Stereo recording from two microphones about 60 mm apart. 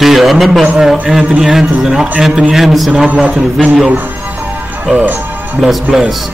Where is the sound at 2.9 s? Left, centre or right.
Centre.